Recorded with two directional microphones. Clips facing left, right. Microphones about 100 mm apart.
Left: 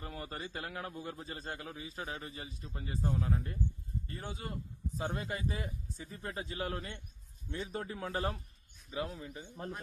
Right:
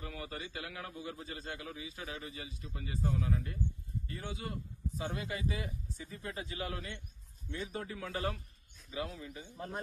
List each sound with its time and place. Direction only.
0.0 s a man's voice: 40° left (ahead or behind)